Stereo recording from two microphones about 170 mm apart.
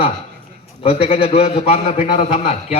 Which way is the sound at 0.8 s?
35° left (ahead or behind).